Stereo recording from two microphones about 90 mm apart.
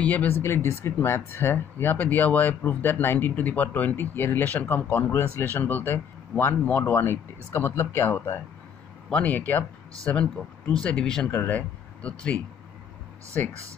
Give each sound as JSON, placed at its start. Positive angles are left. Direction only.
{"t": 0.0, "sound": "speech", "side_deg": 20}
{"t": 9.1, "sound": "speech", "side_deg": 15}
{"t": 13.4, "sound": "speech", "side_deg": 25}